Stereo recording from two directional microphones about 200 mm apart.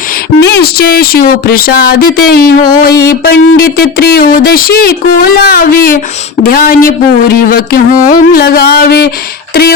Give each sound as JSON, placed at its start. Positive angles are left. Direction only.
{"t": 0.3, "sound": "speech", "side_deg": 60}